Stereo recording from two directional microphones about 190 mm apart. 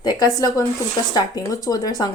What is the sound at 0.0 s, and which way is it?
Speech, 20° left (ahead or behind).